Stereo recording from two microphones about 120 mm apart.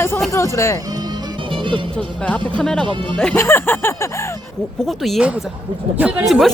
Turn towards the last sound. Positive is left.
turn(degrees=0)  # may be behind; listen again after turning